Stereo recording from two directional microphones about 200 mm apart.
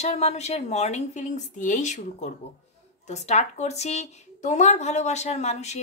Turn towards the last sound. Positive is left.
turn(degrees=35)  # may be behind; listen again after turning